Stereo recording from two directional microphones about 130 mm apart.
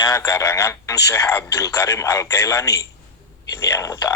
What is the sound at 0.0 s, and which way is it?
Speech, 25° left (ahead or behind).